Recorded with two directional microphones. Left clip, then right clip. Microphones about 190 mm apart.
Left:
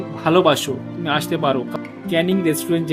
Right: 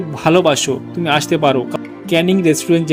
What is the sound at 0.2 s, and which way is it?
Speech, 30° right (ahead or behind).